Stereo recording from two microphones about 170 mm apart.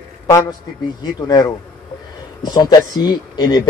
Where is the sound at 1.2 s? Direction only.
20° left (ahead or behind).